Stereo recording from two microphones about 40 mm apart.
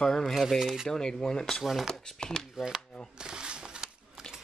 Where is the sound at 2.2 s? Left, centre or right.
Centre.